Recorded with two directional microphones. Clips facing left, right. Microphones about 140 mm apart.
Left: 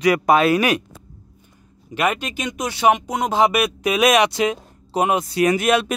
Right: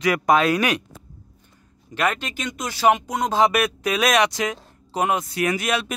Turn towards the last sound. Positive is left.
turn(degrees=55)  # may be behind; listen again after turning